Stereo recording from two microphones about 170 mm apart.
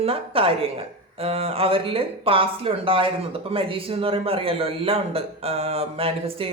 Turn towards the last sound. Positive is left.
turn(degrees=-35)  # may be behind; listen again after turning